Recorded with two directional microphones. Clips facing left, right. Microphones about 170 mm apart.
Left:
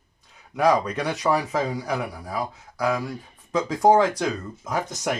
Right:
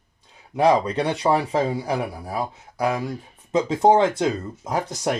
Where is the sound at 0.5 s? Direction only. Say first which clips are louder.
Right 2 dB; 30° right (ahead or behind).